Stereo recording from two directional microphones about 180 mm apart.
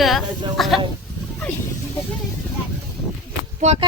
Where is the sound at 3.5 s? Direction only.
40° right (ahead or behind).